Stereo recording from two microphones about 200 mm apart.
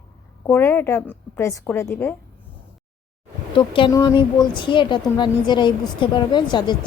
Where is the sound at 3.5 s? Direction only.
25° left (ahead or behind).